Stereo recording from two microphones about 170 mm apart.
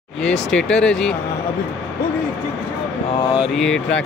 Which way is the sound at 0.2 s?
5° left (ahead or behind).